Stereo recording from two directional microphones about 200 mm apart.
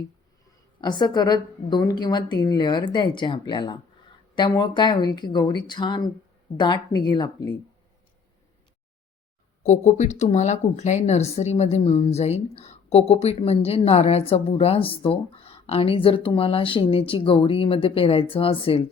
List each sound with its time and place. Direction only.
0.8 s speech: 20° left (ahead or behind)
9.6 s speech: 35° left (ahead or behind)